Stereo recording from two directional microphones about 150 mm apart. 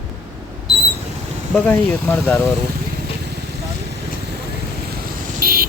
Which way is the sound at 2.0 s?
15° left (ahead or behind).